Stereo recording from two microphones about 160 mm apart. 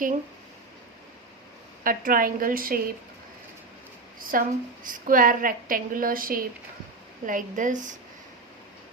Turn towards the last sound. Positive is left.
turn(degrees=-55)  # may be behind; listen again after turning